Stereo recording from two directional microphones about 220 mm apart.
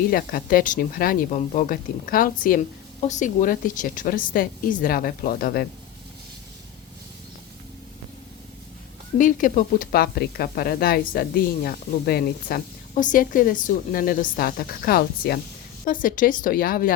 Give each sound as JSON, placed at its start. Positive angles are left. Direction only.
{"t": 0.1, "sound": "speech", "side_deg": 40}
{"t": 9.1, "sound": "speech", "side_deg": 35}